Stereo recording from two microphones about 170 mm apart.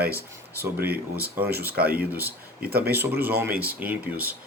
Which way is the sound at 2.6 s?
65° right (ahead or behind).